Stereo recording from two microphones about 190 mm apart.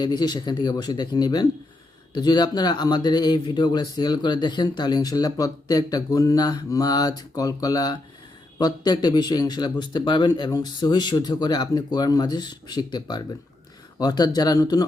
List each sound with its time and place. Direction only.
0.0 s speech: 20° left (ahead or behind)